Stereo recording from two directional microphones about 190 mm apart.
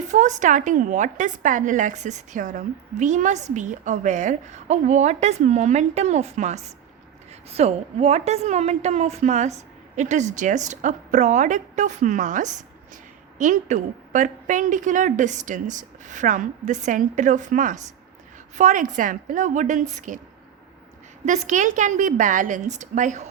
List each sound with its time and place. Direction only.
0.1 s a woman's voice: 40° right (ahead or behind)
21.2 s a woman's voice: 40° right (ahead or behind)